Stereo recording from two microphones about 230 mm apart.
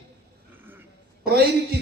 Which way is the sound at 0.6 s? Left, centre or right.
Centre.